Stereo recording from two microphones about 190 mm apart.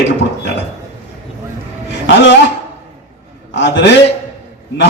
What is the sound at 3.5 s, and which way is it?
Speech, 65° left (ahead or behind).